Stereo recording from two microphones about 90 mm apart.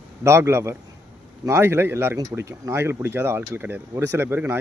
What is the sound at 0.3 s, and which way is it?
Speech, 30° right (ahead or behind).